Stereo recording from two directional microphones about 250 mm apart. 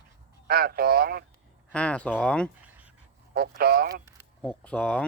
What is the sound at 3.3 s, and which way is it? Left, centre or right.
Speech, right.